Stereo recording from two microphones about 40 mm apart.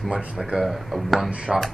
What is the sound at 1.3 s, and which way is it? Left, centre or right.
Speech, right.